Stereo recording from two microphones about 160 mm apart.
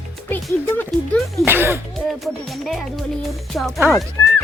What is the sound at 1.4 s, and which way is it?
Speech, 15° right (ahead or behind).